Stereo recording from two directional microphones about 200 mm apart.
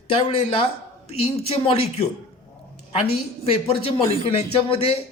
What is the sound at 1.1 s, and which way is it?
Speech, 30° left (ahead or behind).